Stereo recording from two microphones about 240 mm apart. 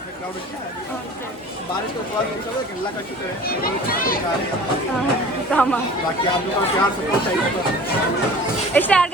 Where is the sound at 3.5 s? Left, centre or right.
Left.